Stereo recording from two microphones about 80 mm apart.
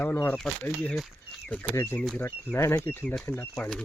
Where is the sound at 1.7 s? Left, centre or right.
Left.